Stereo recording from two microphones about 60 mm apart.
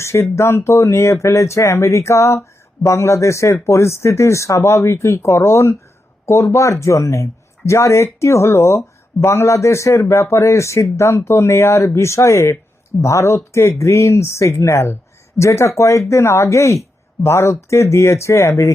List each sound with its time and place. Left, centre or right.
0.0 s speech: left